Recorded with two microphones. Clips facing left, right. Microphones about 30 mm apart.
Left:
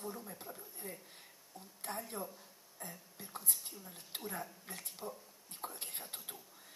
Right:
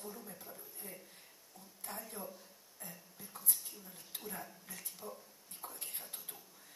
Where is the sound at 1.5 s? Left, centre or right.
Left.